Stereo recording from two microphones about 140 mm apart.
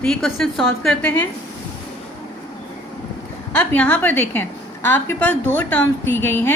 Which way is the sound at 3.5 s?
10° left (ahead or behind).